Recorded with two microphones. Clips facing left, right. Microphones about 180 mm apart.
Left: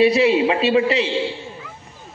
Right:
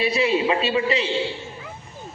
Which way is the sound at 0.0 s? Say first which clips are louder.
Left 6 dB; 75° left (ahead or behind).